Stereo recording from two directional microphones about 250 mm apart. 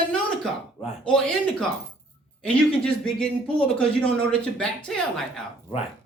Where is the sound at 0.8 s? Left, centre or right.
Centre.